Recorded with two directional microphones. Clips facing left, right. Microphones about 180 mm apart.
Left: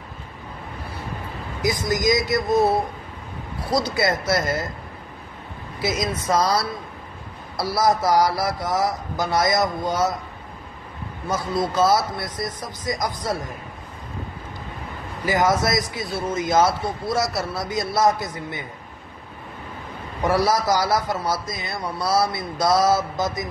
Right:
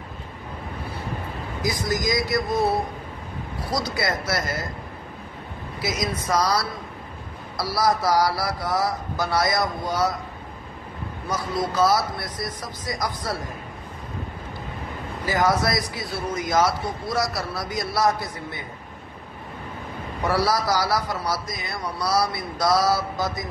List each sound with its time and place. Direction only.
1.6 s a man's voice: 20° left (ahead or behind)
3.7 s a man's voice: 25° left (ahead or behind)
5.8 s a man's voice: 25° left (ahead or behind)
11.2 s a man's voice: 25° left (ahead or behind)
15.2 s a man's voice: 20° left (ahead or behind)
20.2 s a man's voice: 20° left (ahead or behind)